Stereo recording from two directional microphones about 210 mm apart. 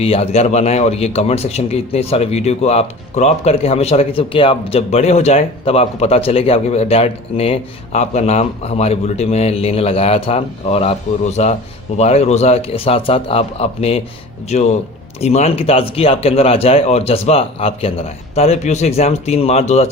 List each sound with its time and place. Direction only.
0.0 s speech: 25° left (ahead or behind)